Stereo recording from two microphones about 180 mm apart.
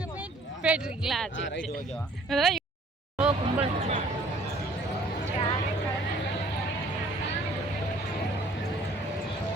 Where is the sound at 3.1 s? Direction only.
10° right (ahead or behind).